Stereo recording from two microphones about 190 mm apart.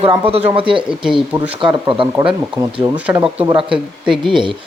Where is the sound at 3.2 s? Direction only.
25° right (ahead or behind).